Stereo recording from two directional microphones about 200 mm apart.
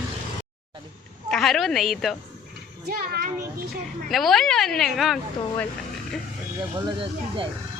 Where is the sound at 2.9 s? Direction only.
50° right (ahead or behind).